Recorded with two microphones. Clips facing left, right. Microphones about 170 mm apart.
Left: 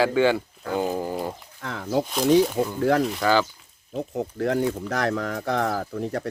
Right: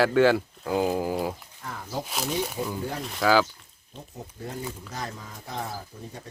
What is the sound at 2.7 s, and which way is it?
Speech, 90° left.